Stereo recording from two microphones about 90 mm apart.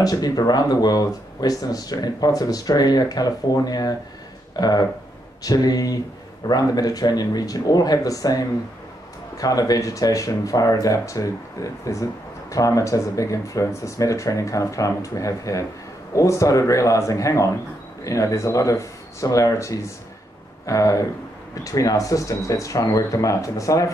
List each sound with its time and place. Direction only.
0.0 s speech: 45° left (ahead or behind)